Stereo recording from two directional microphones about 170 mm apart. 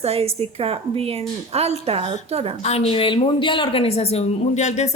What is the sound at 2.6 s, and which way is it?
A woman's voice, 40° left (ahead or behind).